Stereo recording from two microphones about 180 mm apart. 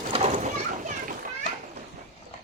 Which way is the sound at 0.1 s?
35° right (ahead or behind).